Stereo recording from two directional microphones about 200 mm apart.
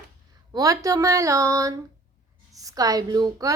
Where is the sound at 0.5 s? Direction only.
15° right (ahead or behind).